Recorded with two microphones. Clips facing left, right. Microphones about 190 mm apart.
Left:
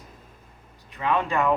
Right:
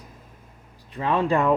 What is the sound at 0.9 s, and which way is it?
Speech, 30° right (ahead or behind).